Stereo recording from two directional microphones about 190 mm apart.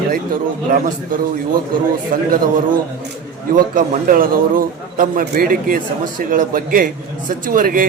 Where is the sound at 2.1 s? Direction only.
45° right (ahead or behind).